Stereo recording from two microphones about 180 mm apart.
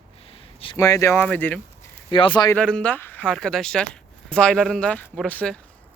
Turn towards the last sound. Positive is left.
turn(degrees=5)  # may be behind; listen again after turning